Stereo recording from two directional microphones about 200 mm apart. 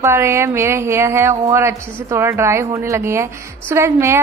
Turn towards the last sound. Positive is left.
turn(degrees=-15)  # may be behind; listen again after turning